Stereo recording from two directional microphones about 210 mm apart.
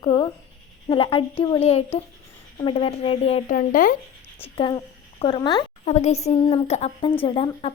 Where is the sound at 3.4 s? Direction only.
40° left (ahead or behind).